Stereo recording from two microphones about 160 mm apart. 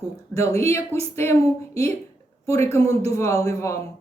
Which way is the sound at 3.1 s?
20° left (ahead or behind).